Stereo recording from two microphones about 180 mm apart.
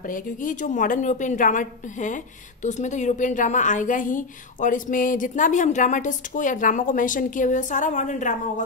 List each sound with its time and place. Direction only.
0.0 s a woman's voice: 50° left (ahead or behind)